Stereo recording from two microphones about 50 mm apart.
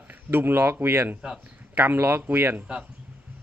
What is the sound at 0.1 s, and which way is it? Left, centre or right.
Speech, right.